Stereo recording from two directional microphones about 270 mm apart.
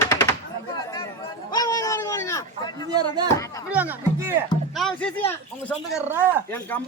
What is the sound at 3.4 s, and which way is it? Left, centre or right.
Speech, centre.